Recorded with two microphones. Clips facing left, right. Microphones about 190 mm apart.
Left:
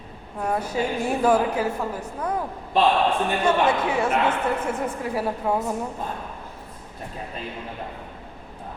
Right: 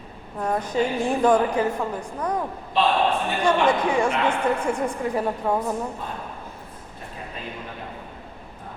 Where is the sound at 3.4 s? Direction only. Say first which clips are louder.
Right 2 dB; 5° left (ahead or behind).